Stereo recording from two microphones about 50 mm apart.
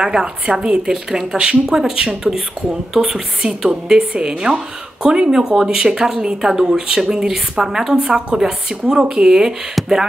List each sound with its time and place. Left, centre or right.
0.0 s speech: centre
2.9 s speech: centre